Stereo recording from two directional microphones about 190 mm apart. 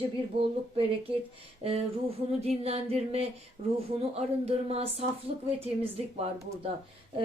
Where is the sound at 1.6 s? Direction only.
30° right (ahead or behind).